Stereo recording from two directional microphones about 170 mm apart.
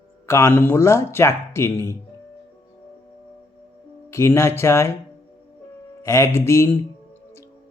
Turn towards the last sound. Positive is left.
turn(degrees=15)  # may be behind; listen again after turning